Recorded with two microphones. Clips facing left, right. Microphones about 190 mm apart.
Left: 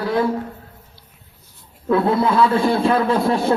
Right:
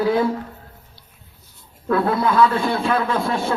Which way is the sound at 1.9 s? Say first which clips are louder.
Left 2 dB; 20° left (ahead or behind).